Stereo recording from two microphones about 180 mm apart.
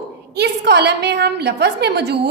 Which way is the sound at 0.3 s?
70° right (ahead or behind).